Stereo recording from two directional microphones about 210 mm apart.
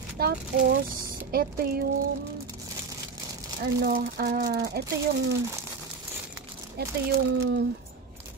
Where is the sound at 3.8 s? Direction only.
45° right (ahead or behind).